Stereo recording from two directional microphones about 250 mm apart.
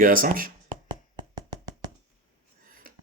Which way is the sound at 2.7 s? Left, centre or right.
Right.